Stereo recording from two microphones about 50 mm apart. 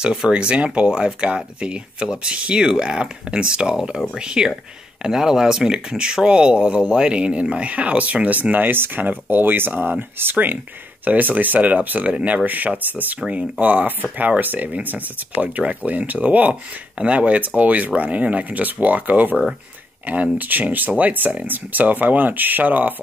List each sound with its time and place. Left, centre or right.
0.0 s speech: centre; by 22.9 s right